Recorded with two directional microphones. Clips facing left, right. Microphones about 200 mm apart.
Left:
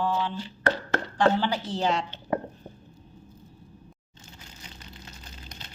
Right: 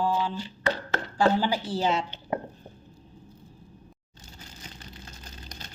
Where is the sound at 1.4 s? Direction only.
10° right (ahead or behind).